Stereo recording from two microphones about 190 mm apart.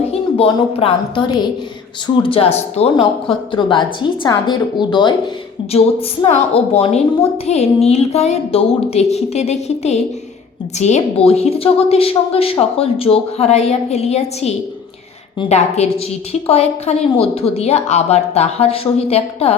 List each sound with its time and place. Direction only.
0.1 s a woman's voice: 30° left (ahead or behind)
6.2 s a woman's voice: 35° left (ahead or behind)